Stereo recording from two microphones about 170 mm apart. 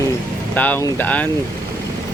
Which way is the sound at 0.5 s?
10° left (ahead or behind).